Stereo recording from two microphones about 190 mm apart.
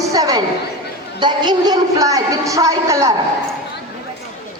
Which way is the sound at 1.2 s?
25° right (ahead or behind).